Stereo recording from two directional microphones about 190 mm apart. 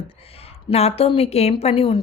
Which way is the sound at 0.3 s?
30° left (ahead or behind).